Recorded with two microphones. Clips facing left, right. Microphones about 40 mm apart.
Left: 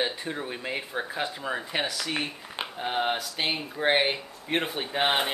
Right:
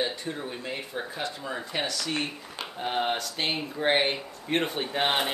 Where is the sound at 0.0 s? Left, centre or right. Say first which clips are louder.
Left 1 dB; centre.